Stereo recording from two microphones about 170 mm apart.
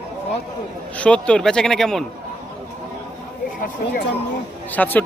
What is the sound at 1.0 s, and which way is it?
Speech, 5° left (ahead or behind).